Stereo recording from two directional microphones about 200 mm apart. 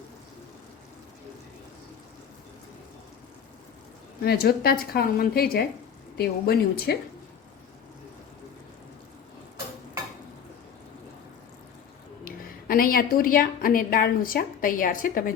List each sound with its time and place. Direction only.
4.2 s a woman's voice: 50° left (ahead or behind)
12.2 s a woman's voice: 45° left (ahead or behind)